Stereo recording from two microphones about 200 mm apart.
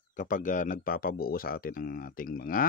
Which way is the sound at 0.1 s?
40° left (ahead or behind).